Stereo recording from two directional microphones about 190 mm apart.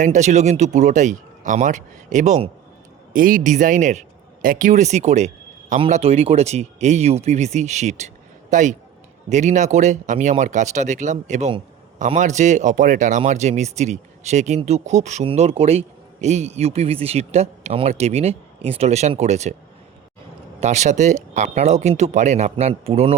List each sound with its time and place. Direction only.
0.0 s speech: 40° right (ahead or behind)
20.6 s speech: 35° right (ahead or behind)